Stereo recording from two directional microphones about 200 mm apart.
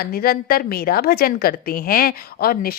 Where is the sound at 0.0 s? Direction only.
50° left (ahead or behind).